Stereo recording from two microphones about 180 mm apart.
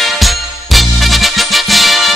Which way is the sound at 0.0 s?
Centre (ahead or behind).